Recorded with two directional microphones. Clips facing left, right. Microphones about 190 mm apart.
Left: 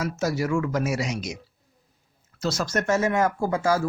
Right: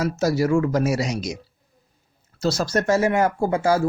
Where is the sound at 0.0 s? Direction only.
35° right (ahead or behind).